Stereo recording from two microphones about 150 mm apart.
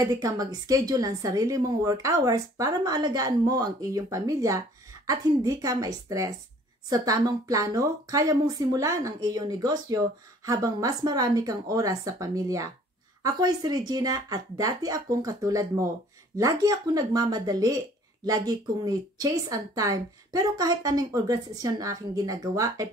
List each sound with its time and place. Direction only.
0.0 s speech: 25° right (ahead or behind)